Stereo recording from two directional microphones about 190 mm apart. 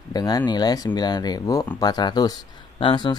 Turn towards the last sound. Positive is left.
turn(degrees=25)  # may be behind; listen again after turning